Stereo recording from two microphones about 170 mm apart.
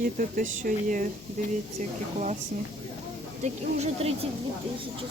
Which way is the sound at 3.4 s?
40° right (ahead or behind).